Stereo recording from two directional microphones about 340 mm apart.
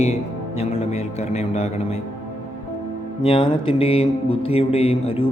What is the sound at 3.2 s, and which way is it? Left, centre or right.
Speech, centre.